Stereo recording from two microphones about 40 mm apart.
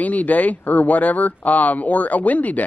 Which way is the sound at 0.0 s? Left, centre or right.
Left.